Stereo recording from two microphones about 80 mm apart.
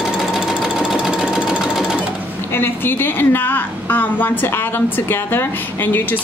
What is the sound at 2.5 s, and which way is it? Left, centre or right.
A woman's voice, left.